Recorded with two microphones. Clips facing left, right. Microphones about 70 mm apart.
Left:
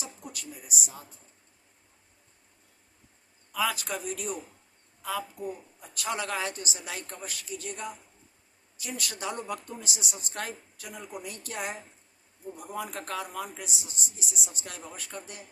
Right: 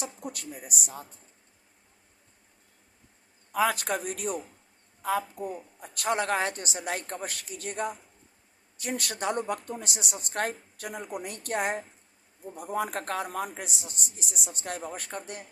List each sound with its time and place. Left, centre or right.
0.0 s speech: right
3.5 s a woman's voice: right